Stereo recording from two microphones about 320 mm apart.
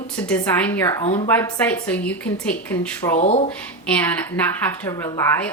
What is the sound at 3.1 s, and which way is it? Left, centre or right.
Speech, centre.